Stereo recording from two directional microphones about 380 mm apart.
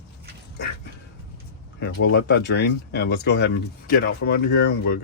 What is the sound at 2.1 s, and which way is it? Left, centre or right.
Speech, left.